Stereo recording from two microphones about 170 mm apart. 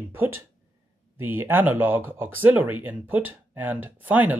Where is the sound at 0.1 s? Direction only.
15° right (ahead or behind).